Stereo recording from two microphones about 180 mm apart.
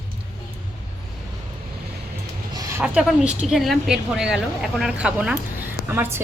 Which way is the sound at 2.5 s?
20° right (ahead or behind).